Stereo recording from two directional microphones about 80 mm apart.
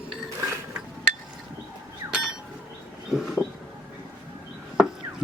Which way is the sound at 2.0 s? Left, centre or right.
Right.